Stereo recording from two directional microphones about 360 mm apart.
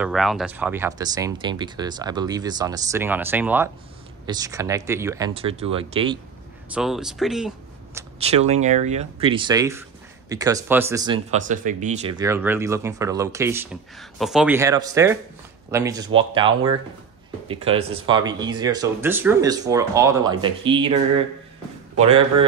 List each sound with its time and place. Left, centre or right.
0.0 s speech: centre
6.7 s speech: centre
8.2 s speech: centre
21.9 s a man's voice: centre